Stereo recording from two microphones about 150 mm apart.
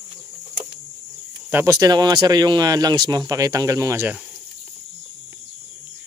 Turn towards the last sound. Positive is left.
turn(degrees=-20)  # may be behind; listen again after turning